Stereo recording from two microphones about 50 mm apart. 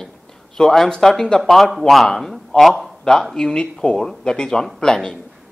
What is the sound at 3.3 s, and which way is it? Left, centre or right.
Speech, centre.